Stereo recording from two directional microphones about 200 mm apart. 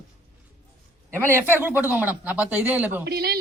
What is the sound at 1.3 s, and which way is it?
Speech, 10° right (ahead or behind).